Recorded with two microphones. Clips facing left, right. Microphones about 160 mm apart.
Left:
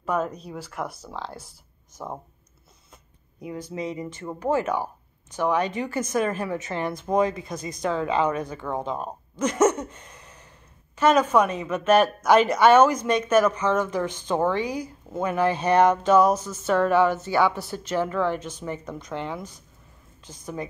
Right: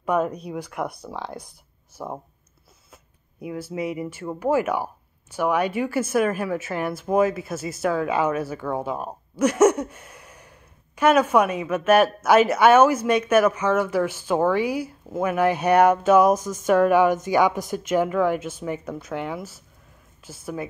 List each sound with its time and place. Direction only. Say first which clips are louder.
0.0 s a woman's voice: right 4 dB; 10° right (ahead or behind)